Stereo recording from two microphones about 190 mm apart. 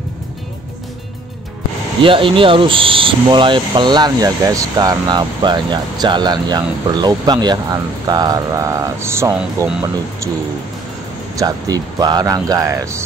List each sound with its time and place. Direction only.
2.0 s speech: 25° right (ahead or behind)
11.3 s speech: 20° right (ahead or behind)